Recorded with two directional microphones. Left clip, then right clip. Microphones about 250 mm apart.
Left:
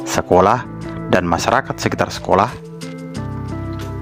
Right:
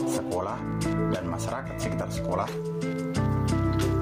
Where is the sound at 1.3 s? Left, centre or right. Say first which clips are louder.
Left 16 dB; left.